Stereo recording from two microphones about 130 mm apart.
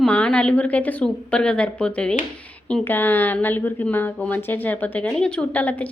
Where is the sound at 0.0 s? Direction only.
10° left (ahead or behind).